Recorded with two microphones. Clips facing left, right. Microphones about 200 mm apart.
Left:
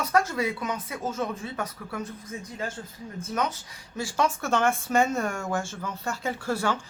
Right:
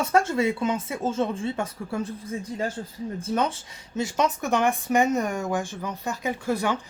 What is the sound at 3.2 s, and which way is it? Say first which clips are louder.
Speech: right 3 dB; 30° right (ahead or behind).